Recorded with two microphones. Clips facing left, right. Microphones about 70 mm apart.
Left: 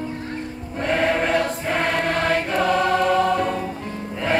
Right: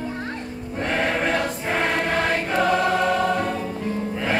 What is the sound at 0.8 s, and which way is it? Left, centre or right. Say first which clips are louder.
Choir: left 3 dB; centre.